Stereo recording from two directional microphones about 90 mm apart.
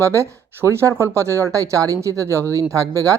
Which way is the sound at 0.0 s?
30° right (ahead or behind).